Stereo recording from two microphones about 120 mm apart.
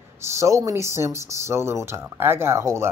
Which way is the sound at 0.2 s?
25° right (ahead or behind).